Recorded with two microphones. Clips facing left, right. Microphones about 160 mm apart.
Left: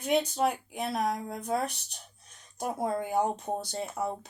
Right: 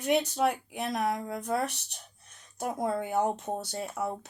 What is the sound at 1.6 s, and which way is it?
Speech, 65° right (ahead or behind).